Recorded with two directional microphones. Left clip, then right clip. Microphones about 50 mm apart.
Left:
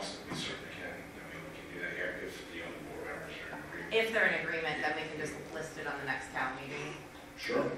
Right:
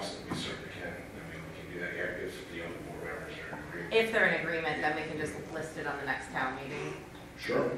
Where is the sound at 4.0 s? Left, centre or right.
Centre.